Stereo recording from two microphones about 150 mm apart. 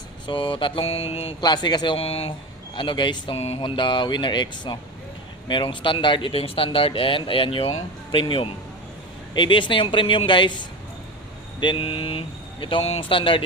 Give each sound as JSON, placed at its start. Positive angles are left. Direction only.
{"t": 0.3, "sound": "speech", "side_deg": 35}